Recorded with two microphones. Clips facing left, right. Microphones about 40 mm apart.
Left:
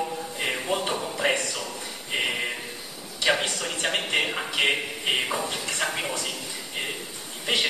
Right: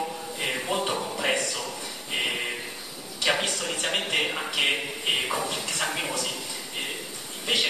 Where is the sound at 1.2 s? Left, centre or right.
Left.